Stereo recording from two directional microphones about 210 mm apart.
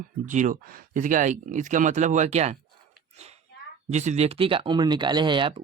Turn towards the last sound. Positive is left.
turn(degrees=-25)  # may be behind; listen again after turning